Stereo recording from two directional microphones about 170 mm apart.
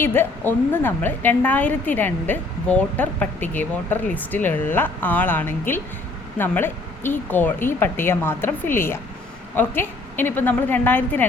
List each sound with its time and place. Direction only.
0.0 s a woman's voice: 10° left (ahead or behind)